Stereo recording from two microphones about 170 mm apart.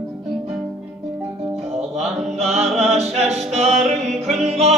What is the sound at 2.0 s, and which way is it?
Mantra, 40° right (ahead or behind).